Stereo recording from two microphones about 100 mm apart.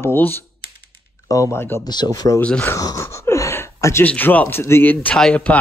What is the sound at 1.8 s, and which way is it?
Speech, 45° left (ahead or behind).